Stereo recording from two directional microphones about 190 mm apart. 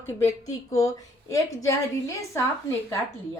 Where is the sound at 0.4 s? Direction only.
15° left (ahead or behind).